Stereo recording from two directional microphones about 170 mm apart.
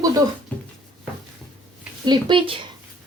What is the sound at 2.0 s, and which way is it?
Speech, 25° right (ahead or behind).